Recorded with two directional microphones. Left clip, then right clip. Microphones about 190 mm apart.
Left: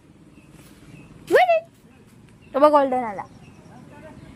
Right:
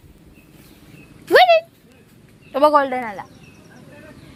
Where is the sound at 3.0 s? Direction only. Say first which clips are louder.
Even; 5° left (ahead or behind).